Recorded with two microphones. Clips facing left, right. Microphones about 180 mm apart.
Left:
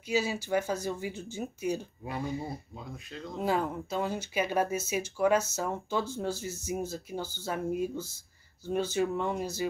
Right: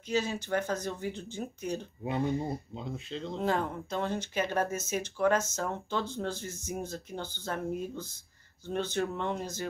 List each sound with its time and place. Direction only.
0.1 s speech: 10° left (ahead or behind)
2.7 s speech: 25° right (ahead or behind)
3.3 s speech: 10° left (ahead or behind)